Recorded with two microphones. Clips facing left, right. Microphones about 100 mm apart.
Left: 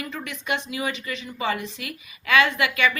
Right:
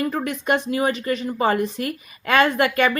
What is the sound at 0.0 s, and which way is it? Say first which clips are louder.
A woman's voice: right 9 dB; 45° right (ahead or behind).